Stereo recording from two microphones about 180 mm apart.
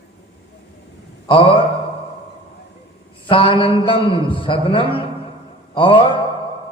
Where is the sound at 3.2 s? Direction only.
30° left (ahead or behind).